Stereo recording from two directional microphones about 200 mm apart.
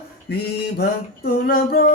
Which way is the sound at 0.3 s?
55° left (ahead or behind).